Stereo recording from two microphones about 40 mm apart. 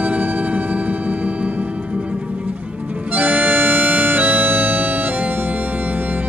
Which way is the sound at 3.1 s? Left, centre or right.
Right.